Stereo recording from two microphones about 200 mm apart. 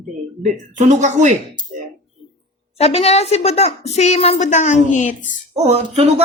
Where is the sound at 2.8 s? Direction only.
30° left (ahead or behind).